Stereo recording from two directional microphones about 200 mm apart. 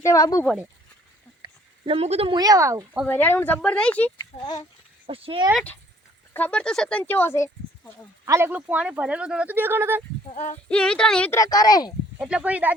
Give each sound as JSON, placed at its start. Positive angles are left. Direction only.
{"t": 0.0, "sound": "speech", "side_deg": 15}
{"t": 0.4, "sound": "speech", "side_deg": -5}
{"t": 1.4, "sound": "speech", "side_deg": -25}
{"t": 3.1, "sound": "speech", "side_deg": 10}
{"t": 5.0, "sound": "speech", "side_deg": -25}
{"t": 6.3, "sound": "speech", "side_deg": 5}
{"t": 8.2, "sound": "speech", "side_deg": -15}
{"t": 10.2, "sound": "speech", "side_deg": 35}
{"t": 10.7, "sound": "speech", "side_deg": 5}
{"t": 12.2, "sound": "speech", "side_deg": -5}